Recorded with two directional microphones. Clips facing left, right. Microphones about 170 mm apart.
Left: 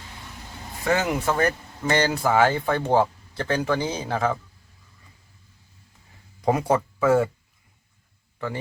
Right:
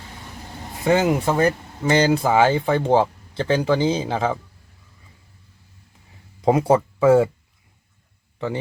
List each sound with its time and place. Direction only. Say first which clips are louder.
0.9 s speech: right 5 dB; 20° right (ahead or behind)
1.2 s speech: right 3 dB; 30° right (ahead or behind)
1.9 s speech: right 4 dB; 15° right (ahead or behind)
6.4 s speech: right 5 dB; 25° right (ahead or behind)